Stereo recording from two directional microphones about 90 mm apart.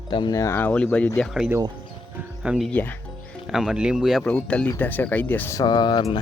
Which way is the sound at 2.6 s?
15° left (ahead or behind).